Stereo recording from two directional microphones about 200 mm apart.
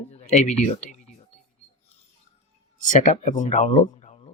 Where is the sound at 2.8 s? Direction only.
40° left (ahead or behind).